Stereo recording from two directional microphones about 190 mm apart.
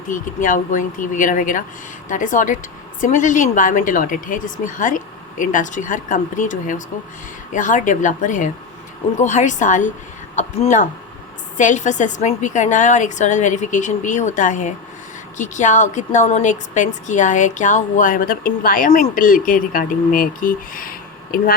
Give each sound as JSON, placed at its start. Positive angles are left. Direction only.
{"t": 0.1, "sound": "a woman's voice", "side_deg": 45}